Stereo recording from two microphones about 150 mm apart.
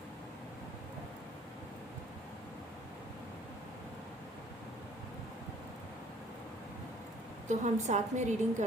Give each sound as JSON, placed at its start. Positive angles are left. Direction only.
{"t": 7.4, "sound": "a woman's voice", "side_deg": -50}